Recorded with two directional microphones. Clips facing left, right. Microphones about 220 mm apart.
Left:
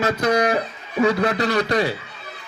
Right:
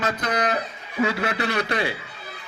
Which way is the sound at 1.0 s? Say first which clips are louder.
Left 5 dB; 40° left (ahead or behind).